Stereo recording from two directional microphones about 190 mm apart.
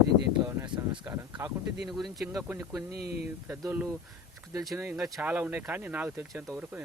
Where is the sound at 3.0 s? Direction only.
55° right (ahead or behind).